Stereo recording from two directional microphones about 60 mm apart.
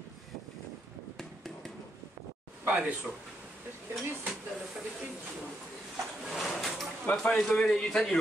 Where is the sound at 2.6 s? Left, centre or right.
Right.